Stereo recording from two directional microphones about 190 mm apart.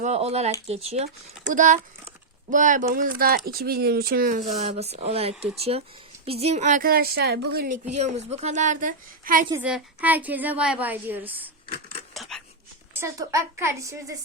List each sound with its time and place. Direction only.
0.0 s a woman's voice: 35° right (ahead or behind); by 7.8 s 55° right (ahead or behind)
7.9 s a woman's voice: 35° right (ahead or behind)
9.6 s a woman's voice: 5° right (ahead or behind)
11.7 s scissors: 30° left (ahead or behind)
12.1 s a sound: centre (ahead or behind)
12.9 s a woman's voice: 15° right (ahead or behind)